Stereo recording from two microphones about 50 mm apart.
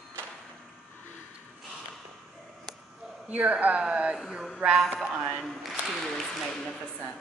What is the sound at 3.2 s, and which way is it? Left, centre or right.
Speech, right.